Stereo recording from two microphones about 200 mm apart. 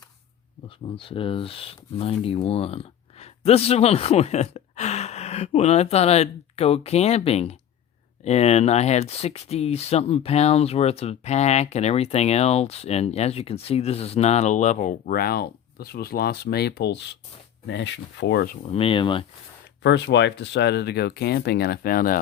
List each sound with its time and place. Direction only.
0.9 s speech: 25° left (ahead or behind); by 18.5 s 55° left (ahead or behind)
18.6 s speech: 30° left (ahead or behind)
19.8 s speech: 60° left (ahead or behind); by 22.2 s 45° left (ahead or behind)